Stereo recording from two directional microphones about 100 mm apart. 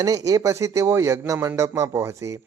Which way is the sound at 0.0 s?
40° right (ahead or behind).